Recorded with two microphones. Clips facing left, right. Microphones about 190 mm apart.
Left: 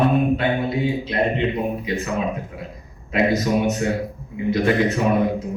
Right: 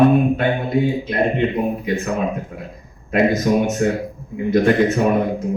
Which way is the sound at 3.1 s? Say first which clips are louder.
Right 3 dB; 50° right (ahead or behind).